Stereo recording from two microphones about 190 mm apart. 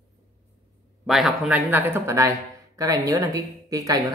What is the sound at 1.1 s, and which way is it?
A woman's voice, centre (ahead or behind).